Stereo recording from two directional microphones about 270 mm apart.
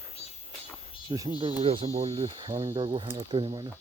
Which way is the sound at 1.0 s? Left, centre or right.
Centre.